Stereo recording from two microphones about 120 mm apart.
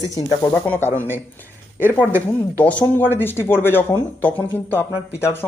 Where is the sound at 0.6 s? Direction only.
15° left (ahead or behind).